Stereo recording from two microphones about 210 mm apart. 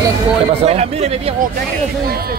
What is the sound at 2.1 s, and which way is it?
Speech, 45° right (ahead or behind).